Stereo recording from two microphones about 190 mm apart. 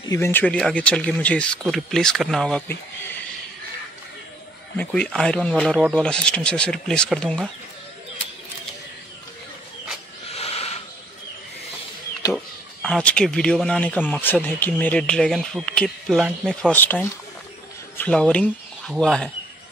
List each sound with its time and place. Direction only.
0.1 s speech: 10° left (ahead or behind)
4.7 s speech: 5° left (ahead or behind)
10.3 s owl: 30° left (ahead or behind)
12.8 s speech: 5° left (ahead or behind)